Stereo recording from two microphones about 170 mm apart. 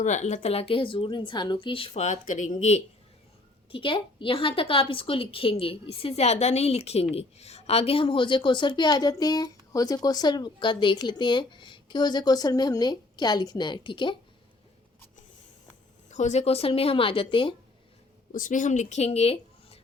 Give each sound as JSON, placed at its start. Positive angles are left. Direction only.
{"t": 0.0, "sound": "a woman's voice", "side_deg": 45}
{"t": 16.0, "sound": "speech", "side_deg": 45}
{"t": 18.3, "sound": "speech", "side_deg": 50}